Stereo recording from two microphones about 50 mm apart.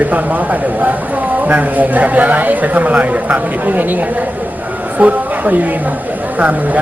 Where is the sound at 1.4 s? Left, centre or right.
Right.